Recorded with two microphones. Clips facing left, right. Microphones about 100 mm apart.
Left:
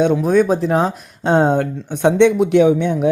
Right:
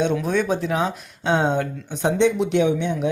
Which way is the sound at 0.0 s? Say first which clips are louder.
Left 7 dB; 45° left (ahead or behind).